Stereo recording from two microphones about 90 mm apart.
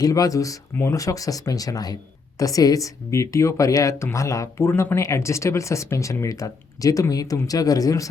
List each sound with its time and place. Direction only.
0.0 s speech: 40° left (ahead or behind)